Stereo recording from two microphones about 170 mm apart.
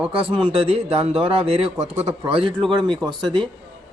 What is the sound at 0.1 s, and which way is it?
Speech, 30° right (ahead or behind).